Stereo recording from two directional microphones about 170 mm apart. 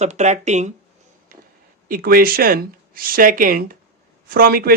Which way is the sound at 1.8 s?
60° right (ahead or behind).